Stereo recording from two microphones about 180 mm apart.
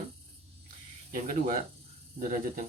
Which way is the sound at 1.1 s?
50° right (ahead or behind).